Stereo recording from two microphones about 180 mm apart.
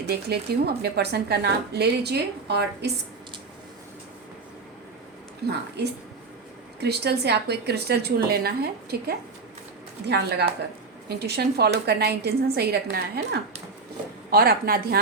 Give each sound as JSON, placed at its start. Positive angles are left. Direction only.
{"t": 0.0, "sound": "speech", "side_deg": -65}
{"t": 5.5, "sound": "a woman's voice", "side_deg": -65}
{"t": 14.3, "sound": "speech", "side_deg": -55}